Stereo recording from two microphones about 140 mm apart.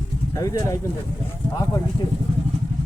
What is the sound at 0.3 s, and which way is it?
Speech, 25° left (ahead or behind).